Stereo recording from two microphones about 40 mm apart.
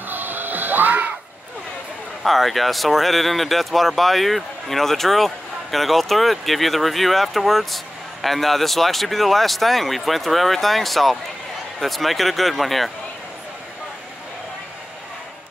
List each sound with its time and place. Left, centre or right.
0.1 s music: right
2.2 s speech: centre